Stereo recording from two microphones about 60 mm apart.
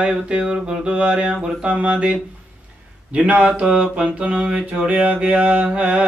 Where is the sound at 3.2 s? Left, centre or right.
Right.